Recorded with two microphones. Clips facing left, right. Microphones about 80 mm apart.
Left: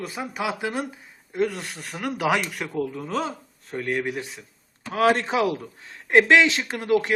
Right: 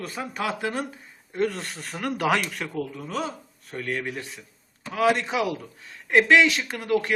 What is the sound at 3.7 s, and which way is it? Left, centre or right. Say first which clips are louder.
Speech: left 3 dB; centre.